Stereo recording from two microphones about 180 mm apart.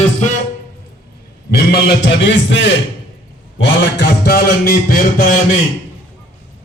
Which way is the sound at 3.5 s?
80° left.